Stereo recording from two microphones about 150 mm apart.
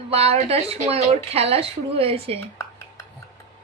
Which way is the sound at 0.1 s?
45° right (ahead or behind).